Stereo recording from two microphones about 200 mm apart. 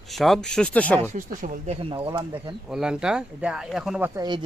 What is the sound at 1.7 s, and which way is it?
Speech, 25° right (ahead or behind).